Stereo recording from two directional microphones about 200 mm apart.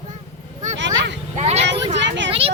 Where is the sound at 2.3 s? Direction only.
30° right (ahead or behind).